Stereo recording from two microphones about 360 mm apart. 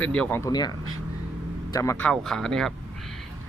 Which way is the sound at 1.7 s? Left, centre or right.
Centre.